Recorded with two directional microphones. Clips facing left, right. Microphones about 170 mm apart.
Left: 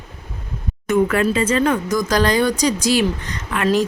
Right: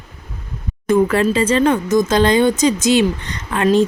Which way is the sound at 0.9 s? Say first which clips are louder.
Right 2 dB; 30° right (ahead or behind).